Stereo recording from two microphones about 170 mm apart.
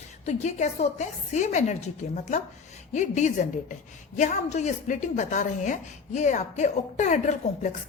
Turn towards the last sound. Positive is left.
turn(degrees=45)  # may be behind; listen again after turning